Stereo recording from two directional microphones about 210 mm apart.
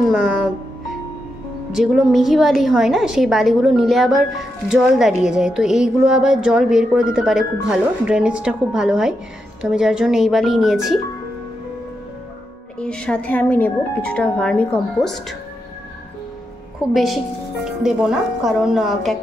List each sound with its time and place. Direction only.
0.1 s speech: 5° right (ahead or behind)
1.7 s a woman's voice: 5° right (ahead or behind)
12.7 s a woman's voice: 5° left (ahead or behind)
16.9 s a woman's voice: centre (ahead or behind)